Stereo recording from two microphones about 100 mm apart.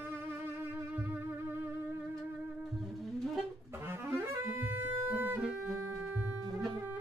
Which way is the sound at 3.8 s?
20° right (ahead or behind).